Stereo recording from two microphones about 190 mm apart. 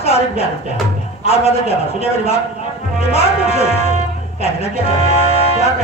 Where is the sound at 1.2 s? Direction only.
30° left (ahead or behind).